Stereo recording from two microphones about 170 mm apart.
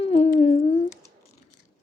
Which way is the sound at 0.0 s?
40° left (ahead or behind).